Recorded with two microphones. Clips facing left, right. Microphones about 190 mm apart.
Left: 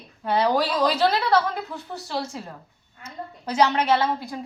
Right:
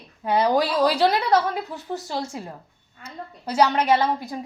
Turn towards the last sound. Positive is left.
turn(degrees=-15)  # may be behind; listen again after turning